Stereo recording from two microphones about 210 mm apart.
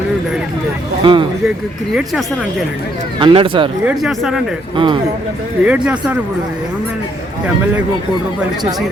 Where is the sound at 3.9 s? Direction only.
Centre (ahead or behind).